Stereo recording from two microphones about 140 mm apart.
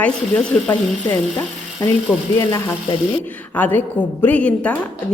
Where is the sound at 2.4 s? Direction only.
20° left (ahead or behind).